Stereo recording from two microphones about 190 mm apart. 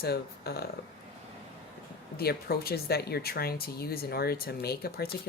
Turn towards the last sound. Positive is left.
turn(degrees=55)  # may be behind; listen again after turning